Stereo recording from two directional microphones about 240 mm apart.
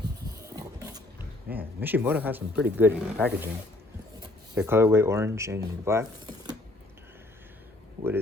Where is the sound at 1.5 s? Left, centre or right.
Right.